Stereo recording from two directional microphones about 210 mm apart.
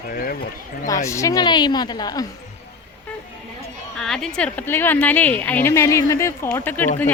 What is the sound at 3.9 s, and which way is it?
A woman's voice, centre (ahead or behind).